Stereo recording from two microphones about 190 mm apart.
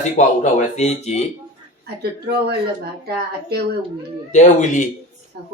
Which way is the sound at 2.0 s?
60° right (ahead or behind).